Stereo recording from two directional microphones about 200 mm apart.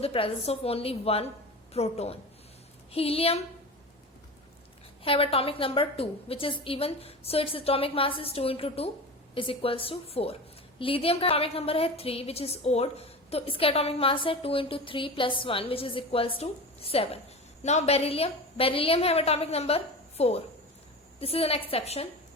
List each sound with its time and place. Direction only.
0.0 s a woman's voice: 25° left (ahead or behind)
5.0 s a woman's voice: 30° left (ahead or behind)